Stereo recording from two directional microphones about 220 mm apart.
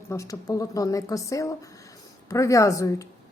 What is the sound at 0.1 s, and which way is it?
A woman's voice, 15° left (ahead or behind).